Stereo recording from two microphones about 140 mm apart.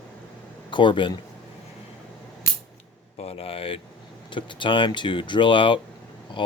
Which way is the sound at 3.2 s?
45° left (ahead or behind).